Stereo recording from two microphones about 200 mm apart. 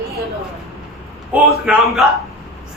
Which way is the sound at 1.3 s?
5° right (ahead or behind).